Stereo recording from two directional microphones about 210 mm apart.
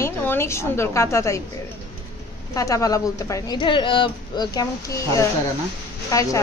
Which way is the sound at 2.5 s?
15° left (ahead or behind).